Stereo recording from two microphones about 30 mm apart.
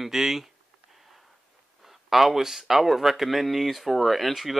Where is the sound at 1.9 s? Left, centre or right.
Centre.